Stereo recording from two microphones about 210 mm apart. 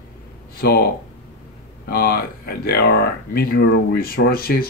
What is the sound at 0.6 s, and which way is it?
Speech, 45° left (ahead or behind).